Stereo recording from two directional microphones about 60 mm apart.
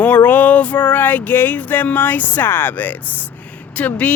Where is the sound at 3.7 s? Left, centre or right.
Left.